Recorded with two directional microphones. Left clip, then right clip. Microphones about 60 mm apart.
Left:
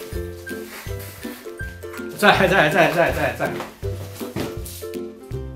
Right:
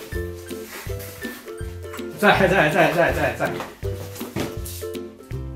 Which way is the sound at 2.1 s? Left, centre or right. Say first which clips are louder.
Left 2 dB; left.